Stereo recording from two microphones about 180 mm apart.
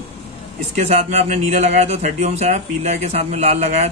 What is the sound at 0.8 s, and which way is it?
A man's voice, 40° right (ahead or behind).